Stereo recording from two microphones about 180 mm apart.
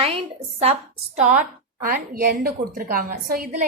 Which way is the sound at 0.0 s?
30° right (ahead or behind).